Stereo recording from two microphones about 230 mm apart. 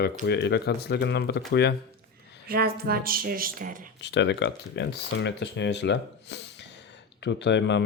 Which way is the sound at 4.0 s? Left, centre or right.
Left.